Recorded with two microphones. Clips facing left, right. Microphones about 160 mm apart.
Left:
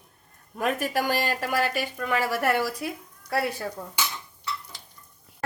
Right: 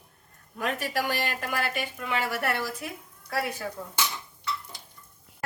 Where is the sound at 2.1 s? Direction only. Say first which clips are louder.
Left 4 dB; 40° left (ahead or behind).